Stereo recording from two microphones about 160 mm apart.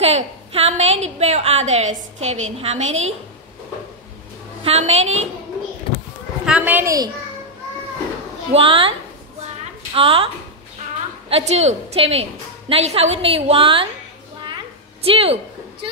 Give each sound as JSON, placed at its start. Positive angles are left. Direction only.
{"t": 0.0, "sound": "a woman's voice", "side_deg": -40}
{"t": 4.6, "sound": "a woman's voice", "side_deg": -45}
{"t": 6.4, "sound": "a woman's voice", "side_deg": -10}
{"t": 8.5, "sound": "a woman's voice", "side_deg": -35}
{"t": 9.9, "sound": "a woman's voice", "side_deg": -35}
{"t": 15.0, "sound": "a woman's voice", "side_deg": -35}